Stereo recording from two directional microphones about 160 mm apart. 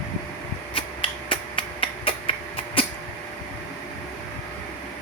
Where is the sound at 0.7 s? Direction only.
30° left (ahead or behind).